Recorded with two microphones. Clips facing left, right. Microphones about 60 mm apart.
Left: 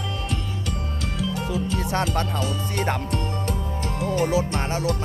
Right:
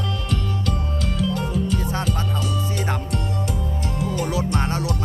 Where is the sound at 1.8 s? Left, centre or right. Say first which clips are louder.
Left 2 dB; left.